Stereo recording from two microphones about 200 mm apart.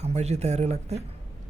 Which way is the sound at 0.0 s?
35° right (ahead or behind).